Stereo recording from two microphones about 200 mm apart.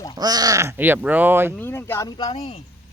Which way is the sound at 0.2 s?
20° right (ahead or behind).